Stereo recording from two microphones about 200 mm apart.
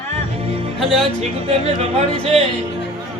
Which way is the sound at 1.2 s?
30° right (ahead or behind).